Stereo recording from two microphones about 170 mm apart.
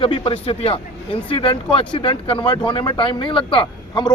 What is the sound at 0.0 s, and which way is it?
Speech, 35° left (ahead or behind).